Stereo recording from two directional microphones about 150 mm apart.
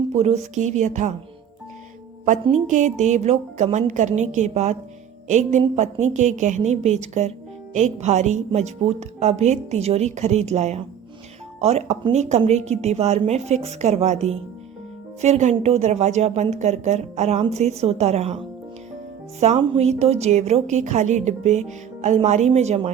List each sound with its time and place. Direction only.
0.1 s a woman's voice: 45° right (ahead or behind)
2.2 s a woman's voice: 55° right (ahead or behind)
19.4 s a woman's voice: 45° right (ahead or behind)